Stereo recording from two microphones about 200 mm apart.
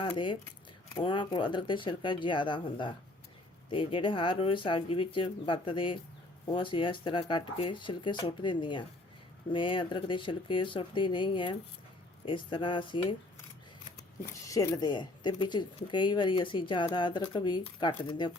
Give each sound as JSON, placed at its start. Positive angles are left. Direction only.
{"t": 0.0, "sound": "speech", "side_deg": 25}
{"t": 14.4, "sound": "speech", "side_deg": 15}